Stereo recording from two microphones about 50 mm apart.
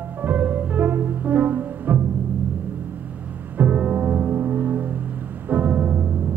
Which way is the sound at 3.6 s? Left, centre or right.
Right.